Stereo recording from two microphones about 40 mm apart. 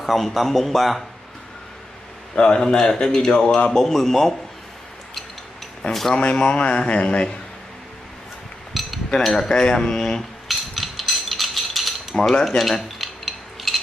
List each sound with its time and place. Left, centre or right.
0.0 s a man's voice: centre
2.3 s speech: left
3.4 s speech: left
3.7 s speech: centre
5.8 s speech: centre
6.1 s speech: left
9.5 s cutlery: centre
10.7 s mechanisms: centre
12.2 s speech: centre
12.4 s cutlery: centre